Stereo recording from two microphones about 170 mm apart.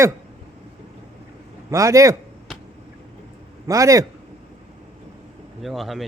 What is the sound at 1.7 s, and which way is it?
Speech, 20° right (ahead or behind).